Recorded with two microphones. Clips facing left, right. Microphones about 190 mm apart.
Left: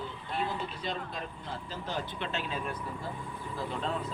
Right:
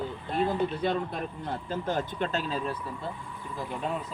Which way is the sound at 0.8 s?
55° right (ahead or behind).